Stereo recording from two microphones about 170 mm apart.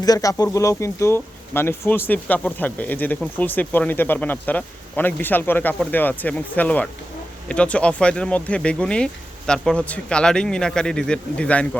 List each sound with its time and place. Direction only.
0.0 s speech: 20° left (ahead or behind)